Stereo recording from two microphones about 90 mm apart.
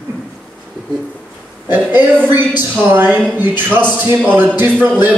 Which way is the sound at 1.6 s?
20° right (ahead or behind).